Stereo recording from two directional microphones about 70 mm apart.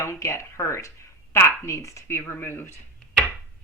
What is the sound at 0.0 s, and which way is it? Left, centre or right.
Speech, left.